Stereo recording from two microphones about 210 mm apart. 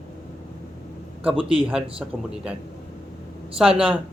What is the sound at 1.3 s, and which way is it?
Speech, 25° right (ahead or behind).